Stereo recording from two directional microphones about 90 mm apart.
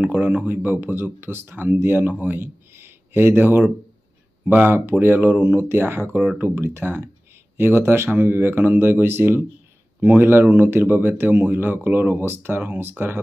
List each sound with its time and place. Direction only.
0.0 s speech: 20° right (ahead or behind)